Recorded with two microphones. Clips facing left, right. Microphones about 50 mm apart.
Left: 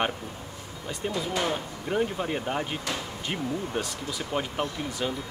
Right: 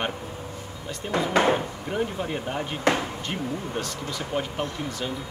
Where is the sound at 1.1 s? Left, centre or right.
Right.